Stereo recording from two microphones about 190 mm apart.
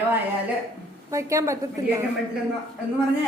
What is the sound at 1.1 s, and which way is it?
Speech, 15° right (ahead or behind).